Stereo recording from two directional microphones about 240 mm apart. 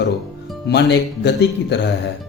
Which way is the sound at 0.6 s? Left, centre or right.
Left.